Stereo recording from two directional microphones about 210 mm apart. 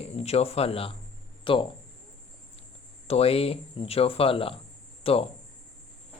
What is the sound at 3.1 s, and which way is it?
Speech, 30° left (ahead or behind).